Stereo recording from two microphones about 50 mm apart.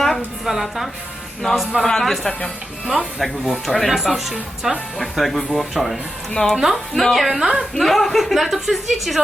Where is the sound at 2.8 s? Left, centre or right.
Centre.